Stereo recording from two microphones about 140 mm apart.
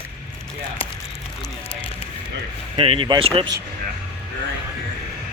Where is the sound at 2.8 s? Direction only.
40° right (ahead or behind).